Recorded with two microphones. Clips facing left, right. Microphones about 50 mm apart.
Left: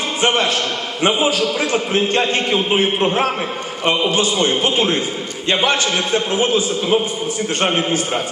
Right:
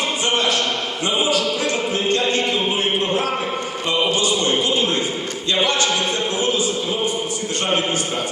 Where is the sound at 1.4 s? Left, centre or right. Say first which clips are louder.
Left 2 dB; left.